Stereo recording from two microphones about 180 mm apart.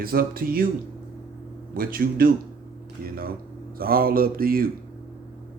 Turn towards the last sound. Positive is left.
turn(degrees=-55)  # may be behind; listen again after turning